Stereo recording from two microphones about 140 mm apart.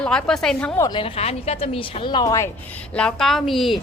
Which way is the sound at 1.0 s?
45° left (ahead or behind).